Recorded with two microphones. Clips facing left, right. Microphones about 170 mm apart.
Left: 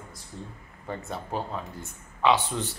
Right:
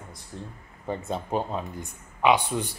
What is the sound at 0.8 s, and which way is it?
Speech, 20° right (ahead or behind).